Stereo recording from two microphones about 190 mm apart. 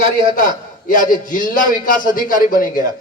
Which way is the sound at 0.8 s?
45° left (ahead or behind).